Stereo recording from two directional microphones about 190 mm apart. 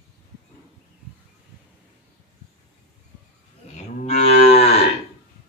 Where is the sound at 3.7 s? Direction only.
30° left (ahead or behind).